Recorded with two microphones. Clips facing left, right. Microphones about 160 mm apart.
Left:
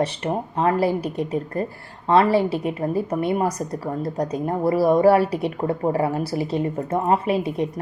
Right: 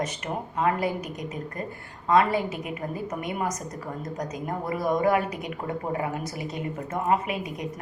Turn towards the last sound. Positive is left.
turn(degrees=30)  # may be behind; listen again after turning